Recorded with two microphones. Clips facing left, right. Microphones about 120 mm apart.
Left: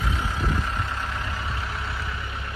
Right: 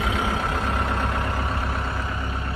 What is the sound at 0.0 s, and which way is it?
Vehicle, 65° right (ahead or behind).